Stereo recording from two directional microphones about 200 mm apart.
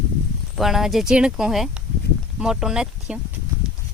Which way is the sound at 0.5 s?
Centre (ahead or behind).